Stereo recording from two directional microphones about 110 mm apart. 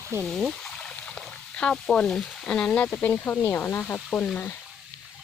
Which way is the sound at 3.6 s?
15° left (ahead or behind).